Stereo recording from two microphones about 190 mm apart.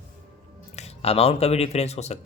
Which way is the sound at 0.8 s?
30° left (ahead or behind).